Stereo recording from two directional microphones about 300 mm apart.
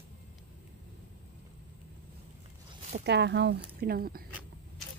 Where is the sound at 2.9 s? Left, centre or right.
Right.